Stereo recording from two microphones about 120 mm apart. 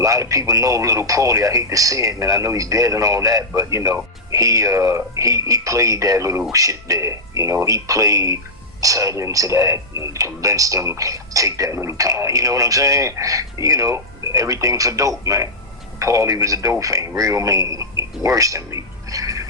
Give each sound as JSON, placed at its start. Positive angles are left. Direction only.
{"t": 0.0, "sound": "a man's voice", "side_deg": -25}